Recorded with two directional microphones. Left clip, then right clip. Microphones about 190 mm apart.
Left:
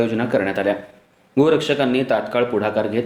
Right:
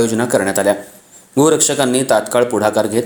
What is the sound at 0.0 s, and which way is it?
Speech, 45° right (ahead or behind).